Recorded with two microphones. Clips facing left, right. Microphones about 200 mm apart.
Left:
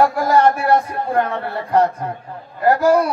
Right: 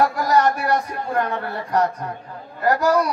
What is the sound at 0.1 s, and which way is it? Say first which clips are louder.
A man's voice: left 3 dB; 25° left (ahead or behind).